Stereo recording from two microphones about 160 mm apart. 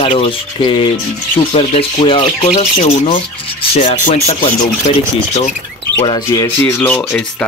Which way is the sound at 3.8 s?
50° left (ahead or behind).